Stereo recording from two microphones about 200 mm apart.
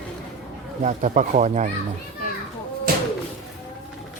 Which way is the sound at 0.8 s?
35° right (ahead or behind).